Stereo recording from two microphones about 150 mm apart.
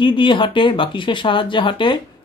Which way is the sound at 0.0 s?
35° left (ahead or behind).